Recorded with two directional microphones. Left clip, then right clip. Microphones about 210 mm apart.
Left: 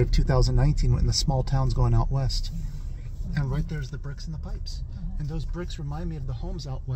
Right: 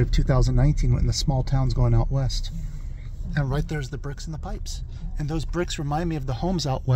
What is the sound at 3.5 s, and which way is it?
Speech, 50° right (ahead or behind).